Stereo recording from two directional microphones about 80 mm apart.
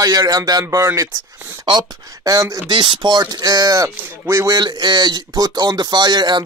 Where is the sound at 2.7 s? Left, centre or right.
Right.